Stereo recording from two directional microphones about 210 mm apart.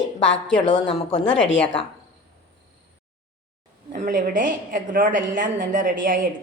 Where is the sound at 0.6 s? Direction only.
20° left (ahead or behind).